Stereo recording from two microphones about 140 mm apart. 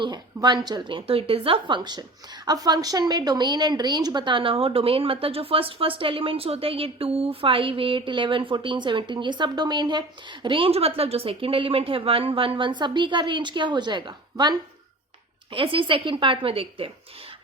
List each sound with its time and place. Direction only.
0.0 s a woman's voice: 30° right (ahead or behind)
15.4 s a woman's voice: 40° right (ahead or behind)